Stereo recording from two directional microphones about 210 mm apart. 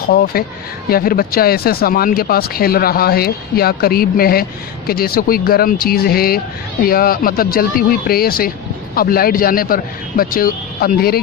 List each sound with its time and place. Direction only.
0.1 s speech: 45° left (ahead or behind)